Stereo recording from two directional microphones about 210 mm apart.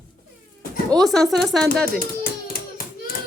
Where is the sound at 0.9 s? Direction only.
Centre (ahead or behind).